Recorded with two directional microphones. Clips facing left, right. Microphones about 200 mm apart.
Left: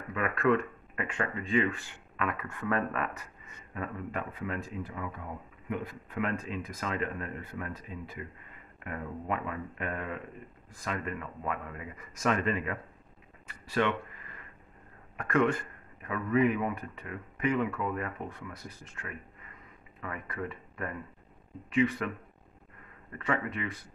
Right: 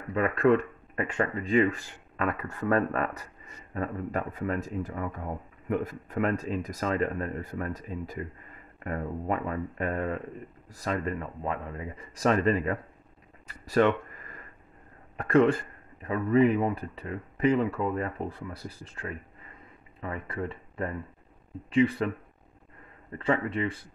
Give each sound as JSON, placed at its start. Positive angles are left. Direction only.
{"t": 0.1, "sound": "speech", "side_deg": -35}
{"t": 15.1, "sound": "speech", "side_deg": -30}
{"t": 23.1, "sound": "speech", "side_deg": -30}